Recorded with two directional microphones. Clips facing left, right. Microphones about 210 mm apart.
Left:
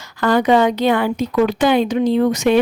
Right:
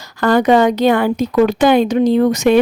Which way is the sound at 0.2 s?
45° right (ahead or behind).